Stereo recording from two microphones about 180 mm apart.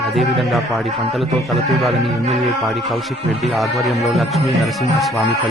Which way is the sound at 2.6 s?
Centre (ahead or behind).